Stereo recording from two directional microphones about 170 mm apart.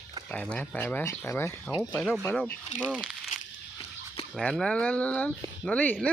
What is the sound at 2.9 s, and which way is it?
Speech, 5° right (ahead or behind).